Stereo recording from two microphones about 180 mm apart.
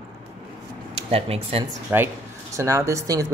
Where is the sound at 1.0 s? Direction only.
35° right (ahead or behind).